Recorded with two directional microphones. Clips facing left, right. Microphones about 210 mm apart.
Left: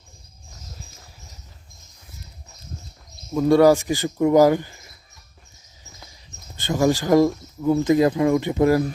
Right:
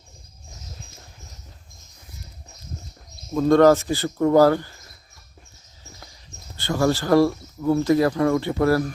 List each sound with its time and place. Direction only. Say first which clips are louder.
3.3 s speech: even; 10° left (ahead or behind)
6.6 s speech: left 1 dB; 15° left (ahead or behind)